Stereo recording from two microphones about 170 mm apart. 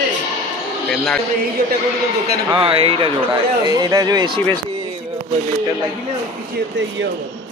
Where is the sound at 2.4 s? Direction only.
30° right (ahead or behind).